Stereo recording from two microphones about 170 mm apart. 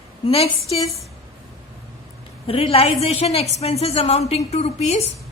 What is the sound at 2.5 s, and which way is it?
A woman's voice, 35° left (ahead or behind).